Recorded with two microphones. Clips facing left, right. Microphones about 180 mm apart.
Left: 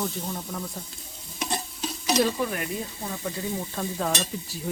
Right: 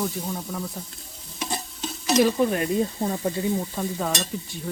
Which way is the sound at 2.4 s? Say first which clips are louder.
Right 6 dB; 25° right (ahead or behind).